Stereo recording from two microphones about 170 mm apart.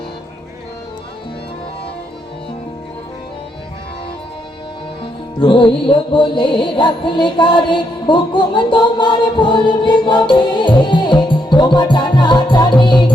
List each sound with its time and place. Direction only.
5.4 s music: 30° left (ahead or behind)